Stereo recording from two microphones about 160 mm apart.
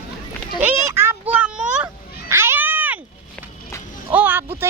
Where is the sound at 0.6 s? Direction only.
15° right (ahead or behind).